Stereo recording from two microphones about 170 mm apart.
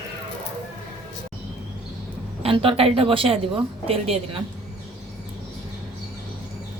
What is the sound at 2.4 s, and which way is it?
A woman's voice, 35° right (ahead or behind).